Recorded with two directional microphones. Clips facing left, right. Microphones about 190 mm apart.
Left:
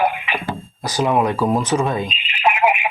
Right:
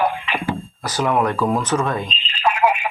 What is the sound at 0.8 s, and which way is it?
Speech, 15° left (ahead or behind).